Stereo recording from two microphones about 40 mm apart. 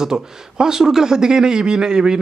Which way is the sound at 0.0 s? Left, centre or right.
Centre.